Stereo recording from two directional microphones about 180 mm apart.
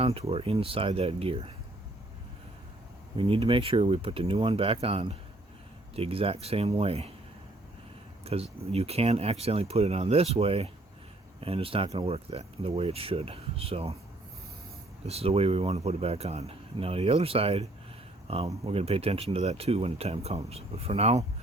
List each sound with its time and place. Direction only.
0.0 s speech: 35° right (ahead or behind)
3.2 s speech: 30° right (ahead or behind)
8.2 s speech: 35° right (ahead or behind)
15.0 s speech: 35° right (ahead or behind)